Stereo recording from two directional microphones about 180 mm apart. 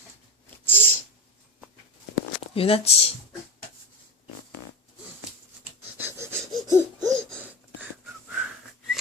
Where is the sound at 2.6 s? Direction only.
30° left (ahead or behind).